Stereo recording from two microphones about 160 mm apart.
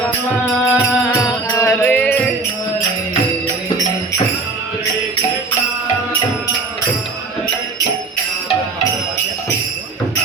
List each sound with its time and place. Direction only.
0.6 s music: 15° left (ahead or behind)